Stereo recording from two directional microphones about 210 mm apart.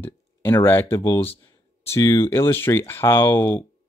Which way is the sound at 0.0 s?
10° left (ahead or behind).